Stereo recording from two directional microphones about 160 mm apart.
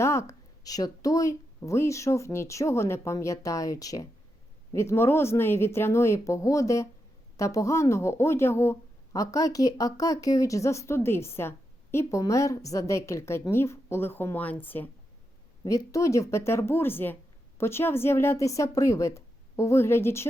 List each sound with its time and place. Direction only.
0.0 s a woman's voice: 20° left (ahead or behind)